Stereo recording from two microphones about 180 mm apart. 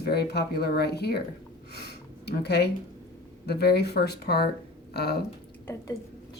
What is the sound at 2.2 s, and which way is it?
Speech, 65° left (ahead or behind).